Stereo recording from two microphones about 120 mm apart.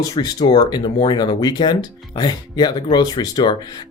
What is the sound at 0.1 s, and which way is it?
Speech, 35° left (ahead or behind).